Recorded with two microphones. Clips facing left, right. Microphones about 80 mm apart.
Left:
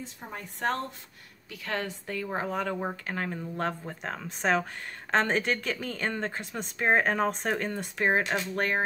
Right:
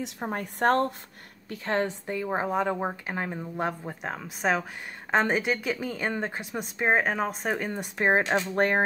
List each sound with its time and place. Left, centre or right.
0.2 s a woman's voice: right
1.5 s speech: right